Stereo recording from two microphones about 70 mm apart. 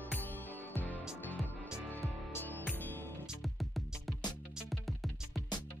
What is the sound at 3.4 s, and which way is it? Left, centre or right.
Music, centre.